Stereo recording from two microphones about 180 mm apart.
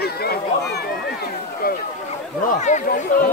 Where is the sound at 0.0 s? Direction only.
60° left (ahead or behind).